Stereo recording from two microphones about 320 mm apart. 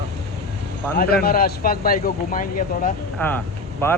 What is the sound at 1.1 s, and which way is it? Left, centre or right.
Speech, left.